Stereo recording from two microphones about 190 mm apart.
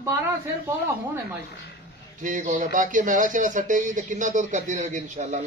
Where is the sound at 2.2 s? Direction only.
40° right (ahead or behind).